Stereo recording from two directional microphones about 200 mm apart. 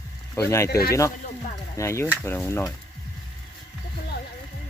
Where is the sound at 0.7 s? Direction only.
50° left (ahead or behind).